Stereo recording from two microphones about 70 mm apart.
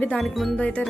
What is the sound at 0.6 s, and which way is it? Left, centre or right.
Speech, centre.